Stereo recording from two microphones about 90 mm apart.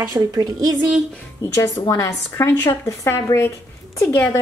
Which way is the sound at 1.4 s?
35° left (ahead or behind).